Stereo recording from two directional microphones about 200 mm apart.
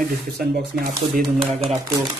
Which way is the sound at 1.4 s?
30° right (ahead or behind).